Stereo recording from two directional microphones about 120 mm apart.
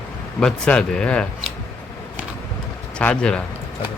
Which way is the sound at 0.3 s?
5° left (ahead or behind).